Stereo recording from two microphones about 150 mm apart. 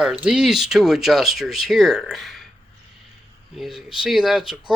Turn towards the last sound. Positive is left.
turn(degrees=-5)  # may be behind; listen again after turning